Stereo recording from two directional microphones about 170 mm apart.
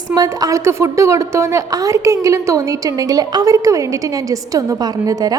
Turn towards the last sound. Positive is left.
turn(degrees=-20)  # may be behind; listen again after turning